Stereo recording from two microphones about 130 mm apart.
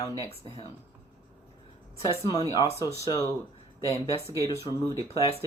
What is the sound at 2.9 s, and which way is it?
Speech, 25° left (ahead or behind).